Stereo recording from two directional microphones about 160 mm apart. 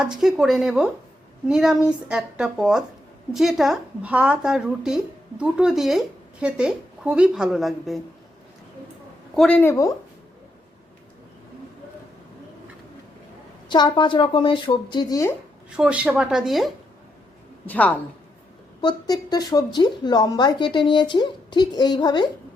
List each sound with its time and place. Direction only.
0.0 s speech: 5° right (ahead or behind)
9.3 s speech: 5° left (ahead or behind)
13.7 s a woman's voice: 30° left (ahead or behind)
15.7 s speech: 5° right (ahead or behind)
17.7 s speech: 10° left (ahead or behind)
18.8 s a woman's voice: 25° left (ahead or behind)